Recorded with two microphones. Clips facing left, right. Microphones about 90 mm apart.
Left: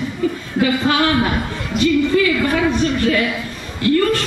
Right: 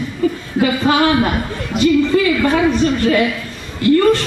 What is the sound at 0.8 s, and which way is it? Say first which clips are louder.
Speech: right 3 dB; 20° right (ahead or behind).